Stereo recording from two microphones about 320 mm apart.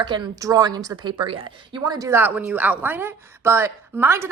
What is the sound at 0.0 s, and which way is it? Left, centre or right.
A woman's voice, centre.